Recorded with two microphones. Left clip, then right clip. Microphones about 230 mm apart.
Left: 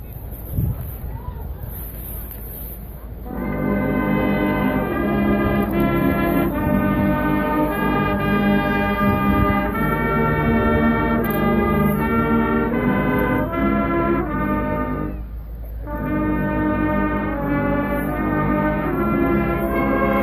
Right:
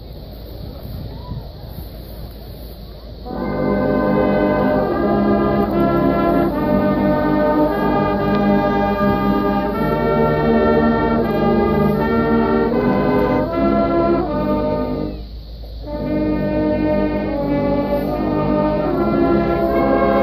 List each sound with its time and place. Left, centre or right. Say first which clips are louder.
3.3 s music: right 4 dB; left
16.3 s music: right 3 dB; centre; by 20.2 s left